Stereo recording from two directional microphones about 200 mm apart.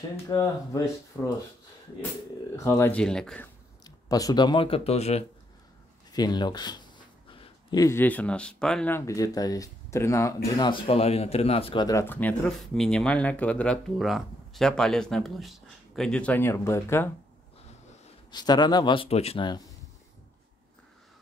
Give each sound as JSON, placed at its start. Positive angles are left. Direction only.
{"t": 0.3, "sound": "speech", "side_deg": 20}
{"t": 2.5, "sound": "speech", "side_deg": 15}
{"t": 3.8, "sound": "speech", "side_deg": 20}
{"t": 6.1, "sound": "speech", "side_deg": 20}
{"t": 18.3, "sound": "speech", "side_deg": 20}